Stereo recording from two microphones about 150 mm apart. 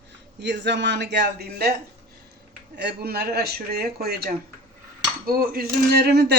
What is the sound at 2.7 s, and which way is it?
Speech, 90° right.